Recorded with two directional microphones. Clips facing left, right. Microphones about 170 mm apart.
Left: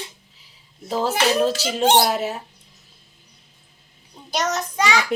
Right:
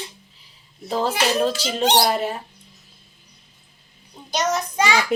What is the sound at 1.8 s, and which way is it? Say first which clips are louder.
Speech: left 2 dB; 50° left (ahead or behind).